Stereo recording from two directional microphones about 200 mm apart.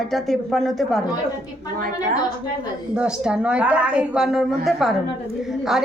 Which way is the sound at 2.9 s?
5° right (ahead or behind).